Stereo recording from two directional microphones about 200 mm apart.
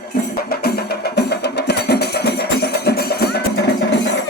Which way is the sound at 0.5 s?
50° left (ahead or behind).